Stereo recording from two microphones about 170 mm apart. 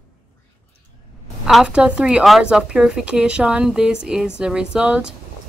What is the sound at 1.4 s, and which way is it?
Speech, 5° right (ahead or behind).